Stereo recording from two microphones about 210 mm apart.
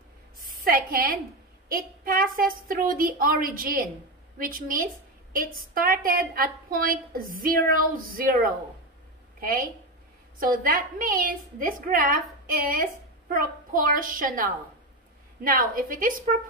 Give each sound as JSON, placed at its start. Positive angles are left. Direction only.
{"t": 0.5, "sound": "a woman's voice", "side_deg": -45}